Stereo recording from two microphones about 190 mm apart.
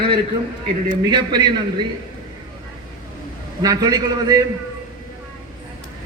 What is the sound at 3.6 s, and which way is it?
Speech, 20° right (ahead or behind).